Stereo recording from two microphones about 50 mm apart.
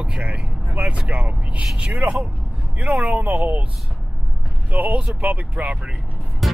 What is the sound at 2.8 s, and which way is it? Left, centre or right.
Speech, right.